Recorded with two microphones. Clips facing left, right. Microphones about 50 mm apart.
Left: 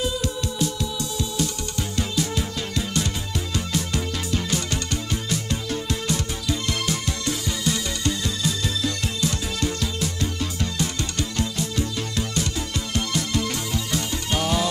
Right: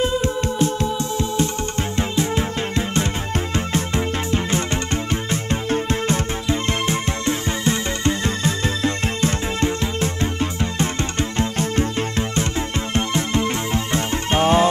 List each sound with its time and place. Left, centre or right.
0.0 s music: right